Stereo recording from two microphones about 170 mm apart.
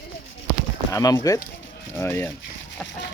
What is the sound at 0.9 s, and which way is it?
Speech, 20° left (ahead or behind).